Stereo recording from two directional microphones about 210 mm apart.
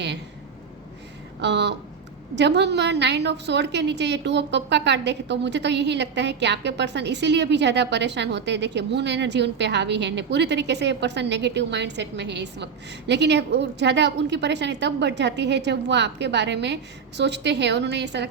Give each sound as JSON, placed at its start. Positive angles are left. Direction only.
{"t": 1.4, "sound": "a woman's voice", "side_deg": -55}